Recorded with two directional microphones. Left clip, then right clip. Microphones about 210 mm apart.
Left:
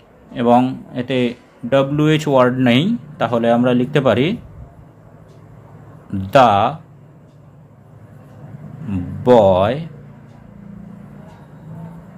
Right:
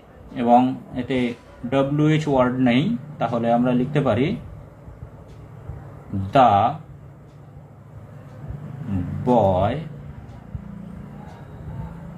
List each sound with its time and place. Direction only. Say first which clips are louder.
0.3 s a man's voice: left 3 dB; 45° left (ahead or behind)
6.3 s a man's voice: left 4 dB; 45° left (ahead or behind)
9.2 s a man's voice: left 7 dB; 45° left (ahead or behind)